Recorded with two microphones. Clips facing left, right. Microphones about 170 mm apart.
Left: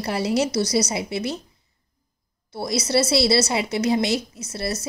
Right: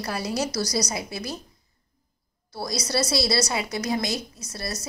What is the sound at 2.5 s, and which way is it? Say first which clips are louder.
A woman's voice: left 5 dB; 25° left (ahead or behind).